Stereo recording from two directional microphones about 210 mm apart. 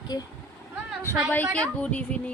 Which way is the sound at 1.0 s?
10° left (ahead or behind).